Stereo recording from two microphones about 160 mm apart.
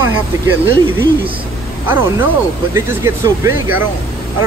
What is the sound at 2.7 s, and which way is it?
Speech, 15° right (ahead or behind).